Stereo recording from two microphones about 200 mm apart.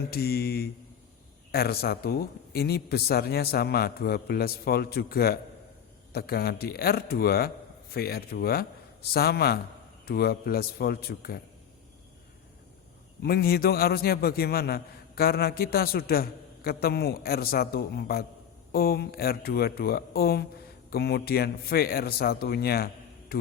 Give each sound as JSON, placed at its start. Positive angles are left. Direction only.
{"t": 0.1, "sound": "a man's voice", "side_deg": 50}
{"t": 13.2, "sound": "a man's voice", "side_deg": 50}